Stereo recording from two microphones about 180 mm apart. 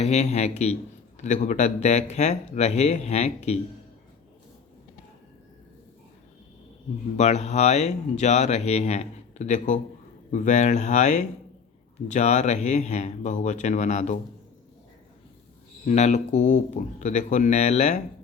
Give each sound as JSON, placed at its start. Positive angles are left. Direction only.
{"t": 0.0, "sound": "speech", "side_deg": 35}
{"t": 7.2, "sound": "speech", "side_deg": 40}
{"t": 15.9, "sound": "speech", "side_deg": 40}